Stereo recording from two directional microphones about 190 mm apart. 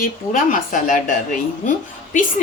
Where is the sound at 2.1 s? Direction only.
40° left (ahead or behind).